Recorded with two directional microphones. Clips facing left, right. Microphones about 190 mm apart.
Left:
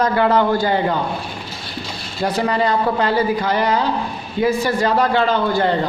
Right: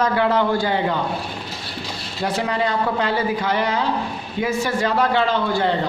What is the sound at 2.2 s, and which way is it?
A man's voice, 40° left (ahead or behind).